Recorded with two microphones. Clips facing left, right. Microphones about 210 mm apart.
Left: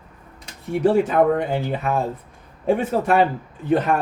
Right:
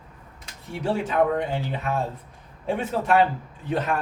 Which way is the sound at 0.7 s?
50° left (ahead or behind).